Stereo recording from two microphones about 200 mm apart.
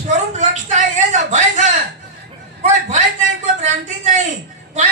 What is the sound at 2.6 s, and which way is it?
A man's voice, 35° right (ahead or behind).